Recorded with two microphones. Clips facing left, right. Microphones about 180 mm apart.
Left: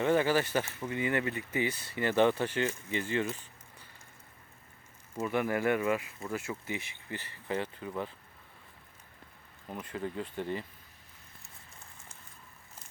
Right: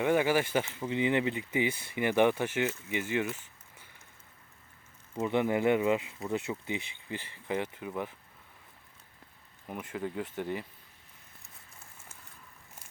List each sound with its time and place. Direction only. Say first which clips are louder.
0.0 s speech: even; 10° right (ahead or behind)
5.2 s speech: right 3 dB; 20° right (ahead or behind)
9.6 s speech: right 1 dB; 10° right (ahead or behind)